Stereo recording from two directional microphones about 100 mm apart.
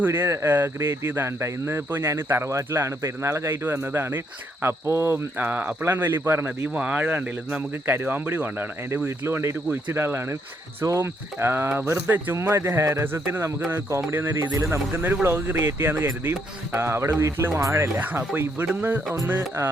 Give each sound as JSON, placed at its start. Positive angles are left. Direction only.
{"t": 0.0, "sound": "speech", "side_deg": -25}
{"t": 14.5, "sound": "speech", "side_deg": -30}